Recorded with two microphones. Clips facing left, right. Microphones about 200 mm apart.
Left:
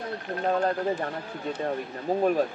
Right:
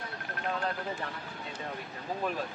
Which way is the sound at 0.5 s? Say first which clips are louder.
Left 9 dB; 45° left (ahead or behind).